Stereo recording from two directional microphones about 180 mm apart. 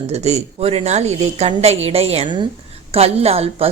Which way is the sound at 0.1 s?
35° right (ahead or behind).